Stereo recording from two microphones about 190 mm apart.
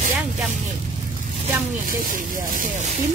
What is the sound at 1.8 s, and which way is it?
Speech, 45° right (ahead or behind).